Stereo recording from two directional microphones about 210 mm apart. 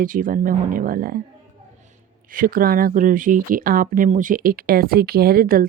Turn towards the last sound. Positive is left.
turn(degrees=-45)  # may be behind; listen again after turning